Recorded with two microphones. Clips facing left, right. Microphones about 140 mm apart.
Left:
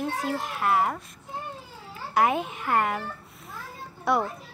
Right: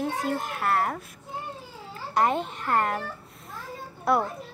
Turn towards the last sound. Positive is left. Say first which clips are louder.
# right 1 dB
turn(degrees=0)  # may be behind; listen again after turning